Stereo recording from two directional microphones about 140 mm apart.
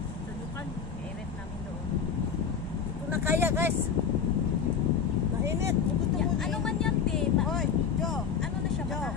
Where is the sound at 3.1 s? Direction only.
15° right (ahead or behind).